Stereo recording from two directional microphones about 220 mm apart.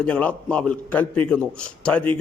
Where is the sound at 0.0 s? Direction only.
5° left (ahead or behind).